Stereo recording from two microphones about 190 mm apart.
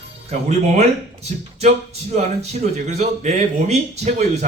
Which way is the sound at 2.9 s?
35° right (ahead or behind).